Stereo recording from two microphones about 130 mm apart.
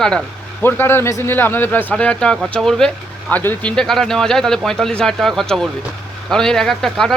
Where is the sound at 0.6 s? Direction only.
15° left (ahead or behind).